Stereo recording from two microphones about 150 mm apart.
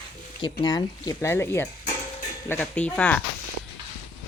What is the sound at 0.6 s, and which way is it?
Speech, 25° left (ahead or behind).